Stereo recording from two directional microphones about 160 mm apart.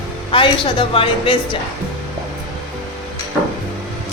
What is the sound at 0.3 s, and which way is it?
A woman's voice, 30° left (ahead or behind).